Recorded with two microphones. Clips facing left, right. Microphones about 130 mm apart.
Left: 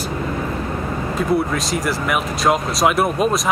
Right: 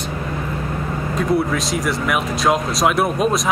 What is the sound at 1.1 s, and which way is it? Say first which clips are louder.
Speech: right 1 dB; centre (ahead or behind).